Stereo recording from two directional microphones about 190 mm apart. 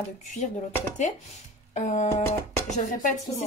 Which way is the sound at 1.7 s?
40° left (ahead or behind).